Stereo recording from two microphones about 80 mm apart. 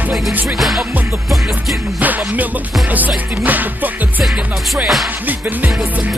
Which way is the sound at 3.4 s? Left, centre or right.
Right.